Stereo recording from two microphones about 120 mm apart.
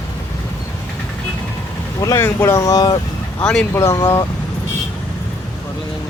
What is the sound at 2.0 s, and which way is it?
Speech, 25° left (ahead or behind).